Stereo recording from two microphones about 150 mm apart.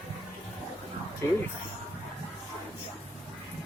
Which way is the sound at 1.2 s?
20° left (ahead or behind).